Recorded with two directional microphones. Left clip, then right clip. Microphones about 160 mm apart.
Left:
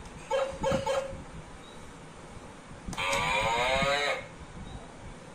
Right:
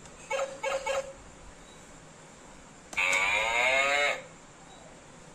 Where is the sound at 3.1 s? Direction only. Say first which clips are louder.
Even; 45° right (ahead or behind).